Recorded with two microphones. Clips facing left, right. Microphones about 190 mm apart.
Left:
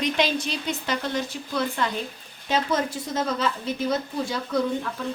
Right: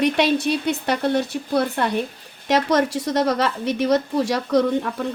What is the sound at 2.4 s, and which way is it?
A woman's voice, 80° right.